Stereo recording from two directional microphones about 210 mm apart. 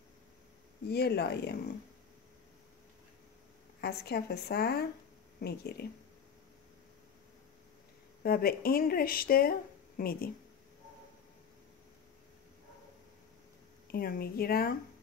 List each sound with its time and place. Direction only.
0.8 s speech: 50° left (ahead or behind)
3.8 s speech: 50° left (ahead or behind)
8.2 s speech: 45° left (ahead or behind)
13.8 s speech: 45° left (ahead or behind)